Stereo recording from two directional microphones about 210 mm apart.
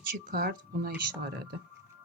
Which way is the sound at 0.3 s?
45° right (ahead or behind).